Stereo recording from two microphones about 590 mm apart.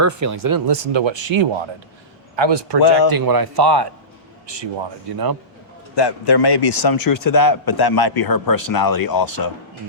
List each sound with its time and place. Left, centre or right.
0.0 s speech: right
0.7 s speech: right
6.0 s a man's voice: left